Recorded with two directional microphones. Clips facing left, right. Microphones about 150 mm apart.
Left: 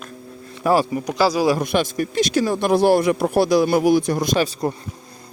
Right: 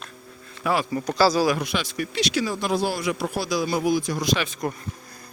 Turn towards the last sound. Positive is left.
turn(degrees=35)  # may be behind; listen again after turning